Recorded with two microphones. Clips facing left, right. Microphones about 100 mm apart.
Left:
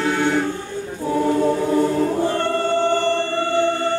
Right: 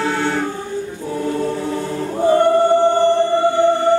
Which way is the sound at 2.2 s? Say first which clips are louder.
Right 7 dB; 15° right (ahead or behind).